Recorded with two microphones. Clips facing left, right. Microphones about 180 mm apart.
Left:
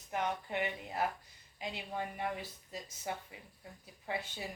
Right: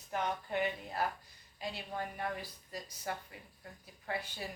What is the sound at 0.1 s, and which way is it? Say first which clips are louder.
Speech: even; 15° left (ahead or behind).